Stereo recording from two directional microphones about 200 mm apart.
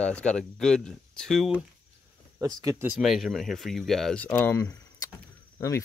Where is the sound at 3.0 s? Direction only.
Centre (ahead or behind).